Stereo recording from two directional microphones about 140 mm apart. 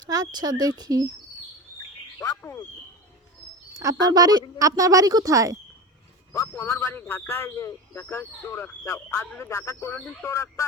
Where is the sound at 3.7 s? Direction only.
25° right (ahead or behind).